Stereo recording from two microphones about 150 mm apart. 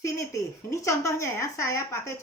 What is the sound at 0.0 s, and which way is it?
Speech, 20° left (ahead or behind).